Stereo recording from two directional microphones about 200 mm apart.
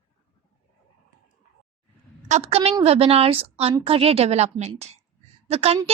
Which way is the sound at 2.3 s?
35° right (ahead or behind).